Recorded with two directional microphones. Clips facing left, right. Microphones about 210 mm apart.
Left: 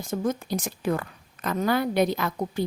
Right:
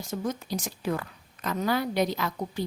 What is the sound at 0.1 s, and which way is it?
A woman's voice, 50° left (ahead or behind).